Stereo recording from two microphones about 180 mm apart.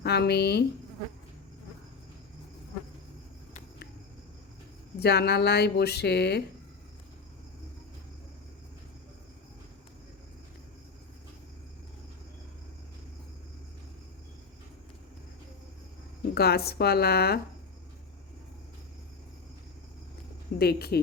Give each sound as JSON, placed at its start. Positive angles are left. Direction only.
{"t": 0.0, "sound": "speech", "side_deg": 65}
{"t": 4.9, "sound": "speech", "side_deg": 65}
{"t": 16.3, "sound": "speech", "side_deg": 60}
{"t": 20.6, "sound": "speech", "side_deg": 60}